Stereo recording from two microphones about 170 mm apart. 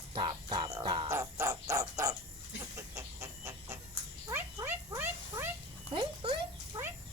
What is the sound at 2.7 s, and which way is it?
Chicken, 15° right (ahead or behind).